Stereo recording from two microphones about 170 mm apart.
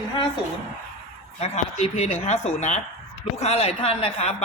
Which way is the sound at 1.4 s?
40° left (ahead or behind).